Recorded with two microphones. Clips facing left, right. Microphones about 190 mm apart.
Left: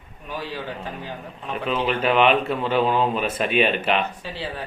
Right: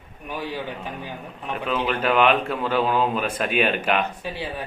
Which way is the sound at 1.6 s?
10° left (ahead or behind).